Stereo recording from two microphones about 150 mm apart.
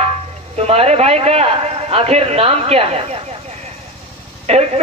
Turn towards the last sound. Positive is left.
turn(degrees=-45)  # may be behind; listen again after turning